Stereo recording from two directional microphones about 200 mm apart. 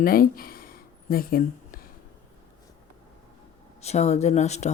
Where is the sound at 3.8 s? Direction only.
35° left (ahead or behind).